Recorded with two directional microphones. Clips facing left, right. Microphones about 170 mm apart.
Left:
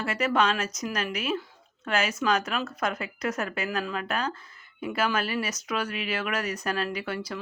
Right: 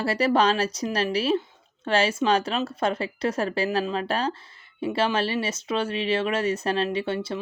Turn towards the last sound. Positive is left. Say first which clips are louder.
# right 5 dB
turn(degrees=-25)  # may be behind; listen again after turning